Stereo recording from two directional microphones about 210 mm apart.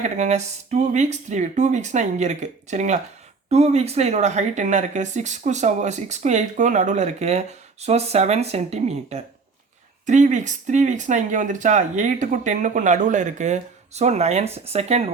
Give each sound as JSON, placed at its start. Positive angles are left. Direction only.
{"t": 0.0, "sound": "speech", "side_deg": -35}